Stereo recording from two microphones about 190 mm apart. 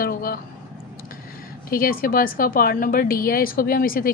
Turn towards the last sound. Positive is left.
turn(degrees=50)  # may be behind; listen again after turning